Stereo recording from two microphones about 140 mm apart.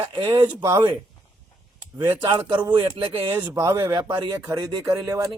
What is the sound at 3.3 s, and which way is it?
Speech, 20° right (ahead or behind).